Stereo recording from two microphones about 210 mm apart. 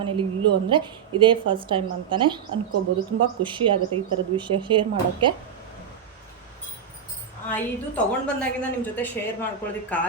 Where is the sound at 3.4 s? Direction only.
25° right (ahead or behind).